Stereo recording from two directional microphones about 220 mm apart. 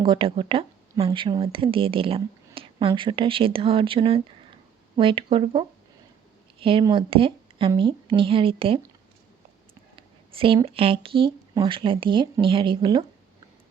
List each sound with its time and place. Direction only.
0.0 s speech: 20° right (ahead or behind)
9.9 s speech: 25° right (ahead or behind)